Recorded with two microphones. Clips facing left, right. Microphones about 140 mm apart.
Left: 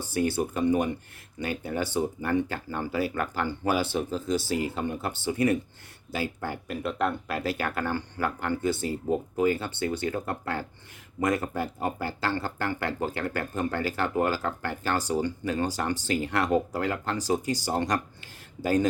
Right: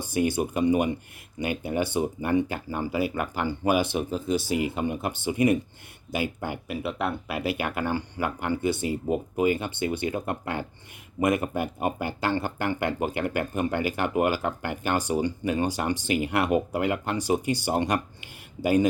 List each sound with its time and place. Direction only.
0.0 s speech: 15° right (ahead or behind)